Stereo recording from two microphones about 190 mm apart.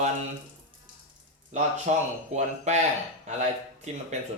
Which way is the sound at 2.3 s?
35° right (ahead or behind).